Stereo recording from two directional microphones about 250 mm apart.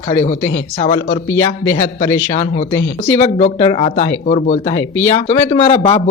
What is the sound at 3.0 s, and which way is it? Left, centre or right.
Speech, left.